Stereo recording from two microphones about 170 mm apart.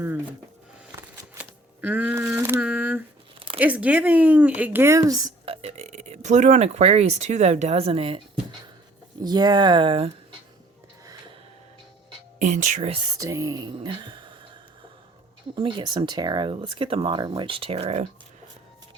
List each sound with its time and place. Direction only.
0.9 s a sound: 10° right (ahead or behind)
3.6 s speech: 10° right (ahead or behind)
5.5 s speech: 40° right (ahead or behind)
9.2 s speech: 25° right (ahead or behind)
12.4 s speech: 45° right (ahead or behind)
12.9 s speech: 25° right (ahead or behind)
15.5 s speech: 30° right (ahead or behind)